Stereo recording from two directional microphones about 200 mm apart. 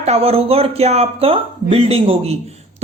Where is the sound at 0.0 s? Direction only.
30° right (ahead or behind).